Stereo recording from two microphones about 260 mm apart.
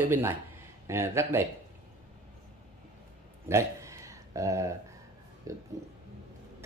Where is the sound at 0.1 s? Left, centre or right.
Centre.